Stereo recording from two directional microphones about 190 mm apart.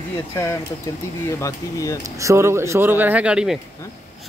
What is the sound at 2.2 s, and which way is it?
Speech, 15° right (ahead or behind).